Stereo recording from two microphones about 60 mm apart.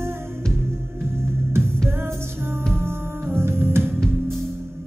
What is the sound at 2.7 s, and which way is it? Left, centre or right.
Music, right.